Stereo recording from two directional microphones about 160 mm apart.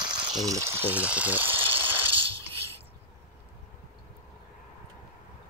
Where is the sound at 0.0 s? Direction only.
30° right (ahead or behind).